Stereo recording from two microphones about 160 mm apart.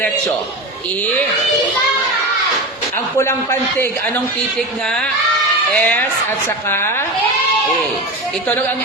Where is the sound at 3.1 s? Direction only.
15° left (ahead or behind).